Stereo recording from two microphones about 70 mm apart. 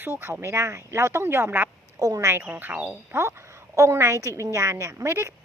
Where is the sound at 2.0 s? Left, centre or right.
Right.